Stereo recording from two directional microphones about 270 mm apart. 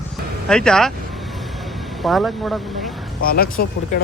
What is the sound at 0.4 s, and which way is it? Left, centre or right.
Vehicle, centre.